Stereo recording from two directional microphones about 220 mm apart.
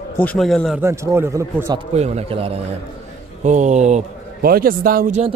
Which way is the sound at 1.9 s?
30° right (ahead or behind).